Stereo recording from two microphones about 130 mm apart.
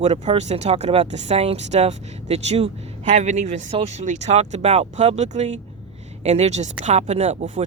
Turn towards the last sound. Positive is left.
turn(degrees=-60)  # may be behind; listen again after turning